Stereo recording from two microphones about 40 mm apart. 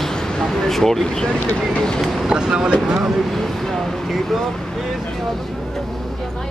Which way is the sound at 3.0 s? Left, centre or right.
Centre.